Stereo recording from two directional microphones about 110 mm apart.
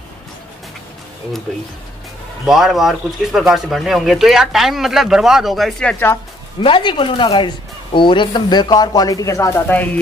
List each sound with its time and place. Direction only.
2.4 s speech: centre (ahead or behind)
6.6 s speech: 50° left (ahead or behind); by 9.6 s 30° left (ahead or behind)